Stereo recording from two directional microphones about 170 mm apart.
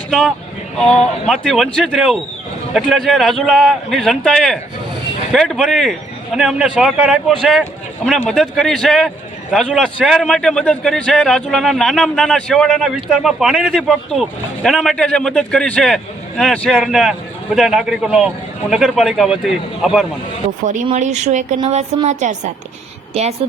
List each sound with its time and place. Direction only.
0.1 s a man's voice: centre (ahead or behind)
20.7 s speech: 45° right (ahead or behind)
23.4 s speech: 35° right (ahead or behind)